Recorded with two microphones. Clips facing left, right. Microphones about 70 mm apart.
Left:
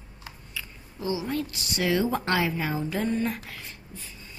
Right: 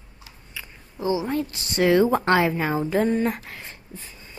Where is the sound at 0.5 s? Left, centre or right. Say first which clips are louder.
Right 2 dB; right.